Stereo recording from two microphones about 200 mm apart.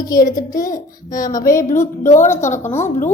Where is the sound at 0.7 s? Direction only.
45° left (ahead or behind).